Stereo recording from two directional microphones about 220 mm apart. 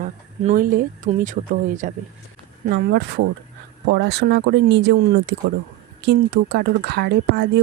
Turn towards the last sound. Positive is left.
turn(degrees=-50)  # may be behind; listen again after turning